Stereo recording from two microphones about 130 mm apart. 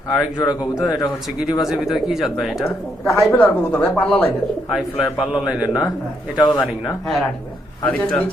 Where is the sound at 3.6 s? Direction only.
10° left (ahead or behind).